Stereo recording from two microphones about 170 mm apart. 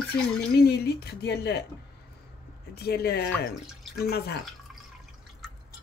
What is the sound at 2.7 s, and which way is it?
Speech, 70° left (ahead or behind).